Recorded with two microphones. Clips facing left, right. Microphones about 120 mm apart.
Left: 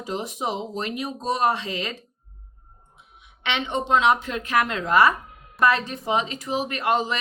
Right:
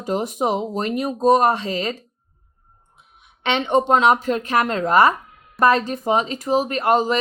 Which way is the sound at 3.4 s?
45° right (ahead or behind).